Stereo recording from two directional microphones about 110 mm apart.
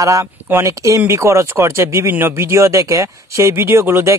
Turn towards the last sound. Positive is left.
turn(degrees=-20)  # may be behind; listen again after turning